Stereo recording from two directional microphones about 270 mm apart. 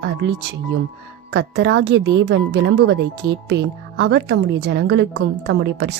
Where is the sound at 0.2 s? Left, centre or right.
Right.